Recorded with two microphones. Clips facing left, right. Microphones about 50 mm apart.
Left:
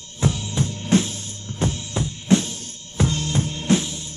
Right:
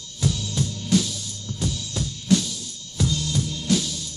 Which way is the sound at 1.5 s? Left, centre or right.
Left.